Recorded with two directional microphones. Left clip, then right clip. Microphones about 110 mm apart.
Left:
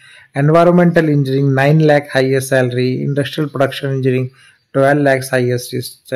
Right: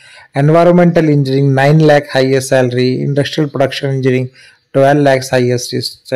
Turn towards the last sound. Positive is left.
turn(degrees=-25)  # may be behind; listen again after turning